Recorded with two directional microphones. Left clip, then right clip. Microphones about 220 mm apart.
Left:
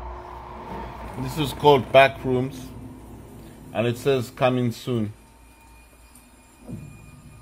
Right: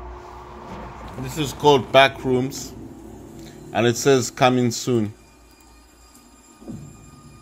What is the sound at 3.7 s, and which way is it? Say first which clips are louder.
Speech: right 5 dB; 15° right (ahead or behind).